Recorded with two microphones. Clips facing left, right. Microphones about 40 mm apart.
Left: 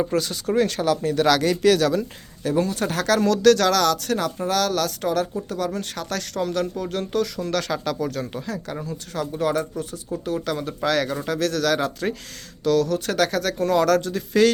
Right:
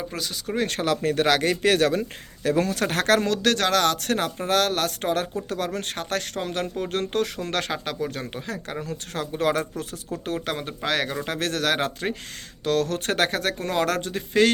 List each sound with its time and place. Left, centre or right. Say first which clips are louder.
0.1 s speech: left 7 dB; centre
0.7 s speech: left 2 dB; right
1.2 s speech: left 4 dB; right
2.4 s speech: even; right
3.2 s speech: left 6 dB; right
8.9 s speech: left 3 dB; right
10.2 s speech: left 3 dB; right
10.8 s speech: left 3 dB; right
11.3 s speech: left 3 dB; right